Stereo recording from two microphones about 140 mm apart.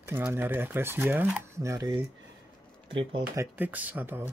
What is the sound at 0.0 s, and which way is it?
Speech, 15° right (ahead or behind).